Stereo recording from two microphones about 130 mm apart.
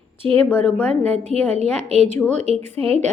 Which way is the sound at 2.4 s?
50° right (ahead or behind).